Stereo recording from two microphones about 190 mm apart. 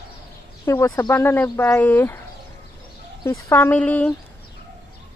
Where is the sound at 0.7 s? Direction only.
15° left (ahead or behind).